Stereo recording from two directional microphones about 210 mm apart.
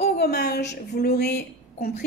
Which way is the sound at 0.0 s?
50° left (ahead or behind).